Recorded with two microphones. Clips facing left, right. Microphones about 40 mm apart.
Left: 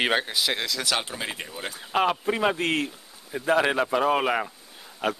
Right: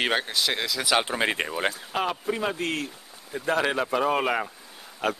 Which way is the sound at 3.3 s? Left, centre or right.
Centre.